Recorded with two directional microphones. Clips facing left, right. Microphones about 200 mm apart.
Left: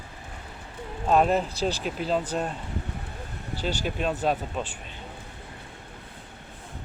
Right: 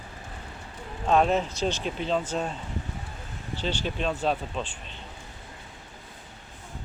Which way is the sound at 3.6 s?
10° left (ahead or behind).